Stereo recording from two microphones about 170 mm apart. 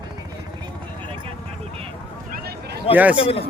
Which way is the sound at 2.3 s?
65° right (ahead or behind).